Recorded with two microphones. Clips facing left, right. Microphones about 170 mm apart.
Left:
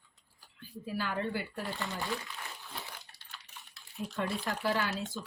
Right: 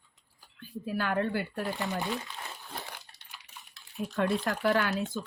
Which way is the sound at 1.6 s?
20° right (ahead or behind).